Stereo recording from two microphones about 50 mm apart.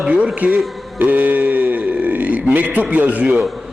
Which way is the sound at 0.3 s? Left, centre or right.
Right.